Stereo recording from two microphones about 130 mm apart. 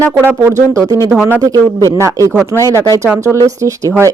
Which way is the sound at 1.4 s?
30° right (ahead or behind).